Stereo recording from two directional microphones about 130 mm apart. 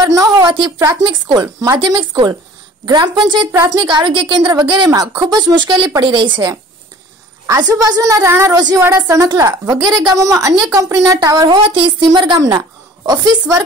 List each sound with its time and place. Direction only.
0.0 s a woman's voice: 30° right (ahead or behind)
1.2 s a woman's voice: 35° right (ahead or behind)